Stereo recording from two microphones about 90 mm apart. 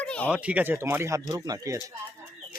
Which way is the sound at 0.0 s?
15° left (ahead or behind).